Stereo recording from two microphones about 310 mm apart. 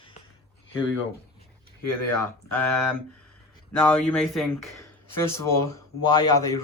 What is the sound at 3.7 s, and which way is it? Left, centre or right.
Speech, centre.